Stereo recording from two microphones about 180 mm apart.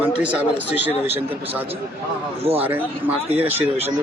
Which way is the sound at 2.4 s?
35° right (ahead or behind).